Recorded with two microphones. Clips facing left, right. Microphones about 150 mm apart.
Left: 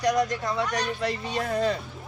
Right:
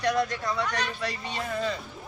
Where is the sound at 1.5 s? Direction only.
40° left (ahead or behind).